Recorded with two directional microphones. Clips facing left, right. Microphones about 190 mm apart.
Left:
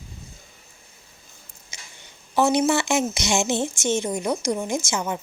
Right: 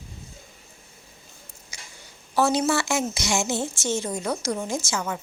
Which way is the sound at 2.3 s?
20° left (ahead or behind).